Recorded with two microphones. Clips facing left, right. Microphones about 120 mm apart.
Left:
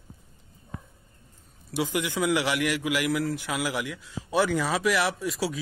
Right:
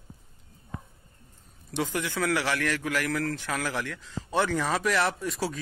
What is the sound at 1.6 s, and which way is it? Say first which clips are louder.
A man's voice: left 2 dB; 10° left (ahead or behind).